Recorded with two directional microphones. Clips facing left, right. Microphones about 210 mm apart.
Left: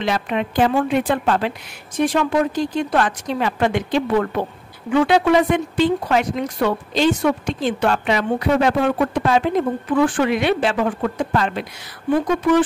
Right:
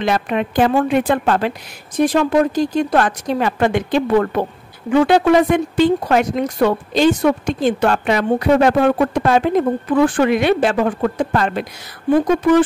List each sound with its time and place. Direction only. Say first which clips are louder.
0.0 s speech: right 3 dB; 50° right (ahead or behind)